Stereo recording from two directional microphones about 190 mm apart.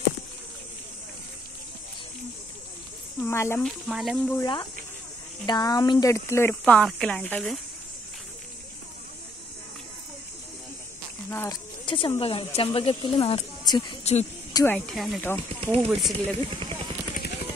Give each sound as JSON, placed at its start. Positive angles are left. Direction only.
{"t": 3.2, "sound": "speech", "side_deg": 15}
{"t": 3.9, "sound": "speech", "side_deg": 0}
{"t": 4.4, "sound": "speech", "side_deg": 25}
{"t": 11.2, "sound": "speech", "side_deg": 10}
{"t": 11.8, "sound": "speech", "side_deg": 25}
{"t": 14.5, "sound": "speech", "side_deg": 15}
{"t": 14.9, "sound": "speech", "side_deg": 0}
{"t": 15.2, "sound": "speech", "side_deg": 10}
{"t": 15.9, "sound": "speech", "side_deg": 0}
{"t": 16.5, "sound": "vehicle", "side_deg": -30}